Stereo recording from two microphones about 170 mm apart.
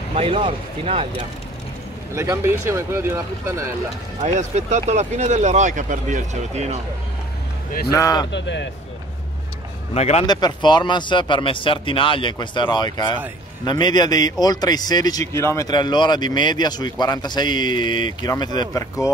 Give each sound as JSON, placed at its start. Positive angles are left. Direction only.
{"t": 0.1, "sound": "speech", "side_deg": -30}
{"t": 2.1, "sound": "speech", "side_deg": -15}
{"t": 4.2, "sound": "speech", "side_deg": -40}
{"t": 7.9, "sound": "speech", "side_deg": 20}
{"t": 8.3, "sound": "speech", "side_deg": 90}
{"t": 9.9, "sound": "speech", "side_deg": 40}
{"t": 10.2, "sound": "speech", "side_deg": 25}